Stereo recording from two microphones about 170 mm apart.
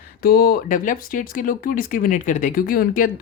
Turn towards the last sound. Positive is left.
turn(degrees=55)  # may be behind; listen again after turning